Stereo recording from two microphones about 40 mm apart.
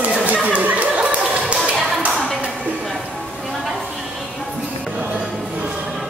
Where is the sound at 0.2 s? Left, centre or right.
Right.